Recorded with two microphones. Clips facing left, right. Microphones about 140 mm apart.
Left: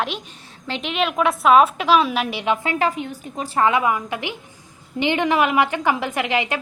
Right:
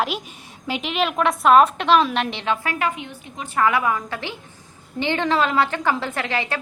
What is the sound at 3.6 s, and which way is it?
A woman's voice, 20° left (ahead or behind).